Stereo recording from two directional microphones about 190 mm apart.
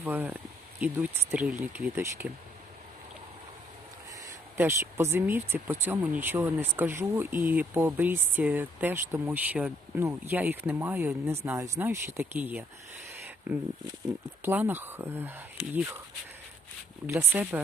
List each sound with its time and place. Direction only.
0.0 s speech: 10° right (ahead or behind)
4.2 s speech: 10° right (ahead or behind)
17.1 s speech: 10° right (ahead or behind)